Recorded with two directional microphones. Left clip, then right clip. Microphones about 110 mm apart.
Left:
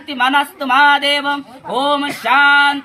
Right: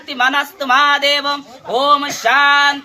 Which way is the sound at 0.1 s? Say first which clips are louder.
Left 1 dB; 35° right (ahead or behind).